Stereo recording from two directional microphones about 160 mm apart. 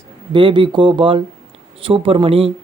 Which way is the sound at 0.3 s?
30° right (ahead or behind).